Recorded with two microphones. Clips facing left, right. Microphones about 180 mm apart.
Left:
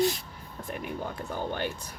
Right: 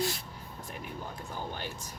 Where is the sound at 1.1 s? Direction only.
65° left (ahead or behind).